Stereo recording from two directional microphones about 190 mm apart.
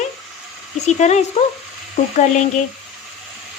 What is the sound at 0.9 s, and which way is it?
A woman's voice, 35° left (ahead or behind).